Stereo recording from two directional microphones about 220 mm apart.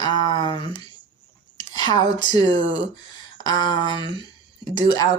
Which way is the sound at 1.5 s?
20° left (ahead or behind).